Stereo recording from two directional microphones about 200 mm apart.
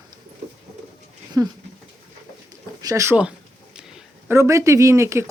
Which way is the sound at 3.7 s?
5° right (ahead or behind).